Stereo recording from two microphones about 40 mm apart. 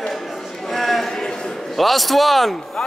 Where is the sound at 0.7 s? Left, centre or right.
Centre.